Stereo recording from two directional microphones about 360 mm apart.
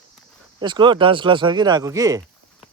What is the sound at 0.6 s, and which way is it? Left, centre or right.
Speech, centre.